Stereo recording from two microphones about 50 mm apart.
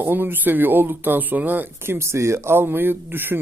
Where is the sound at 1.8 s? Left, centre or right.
Right.